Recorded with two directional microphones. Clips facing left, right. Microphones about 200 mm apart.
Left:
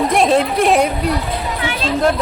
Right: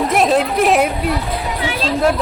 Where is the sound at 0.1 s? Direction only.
Centre (ahead or behind).